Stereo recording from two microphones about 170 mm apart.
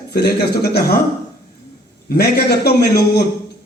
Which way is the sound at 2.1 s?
65° left (ahead or behind).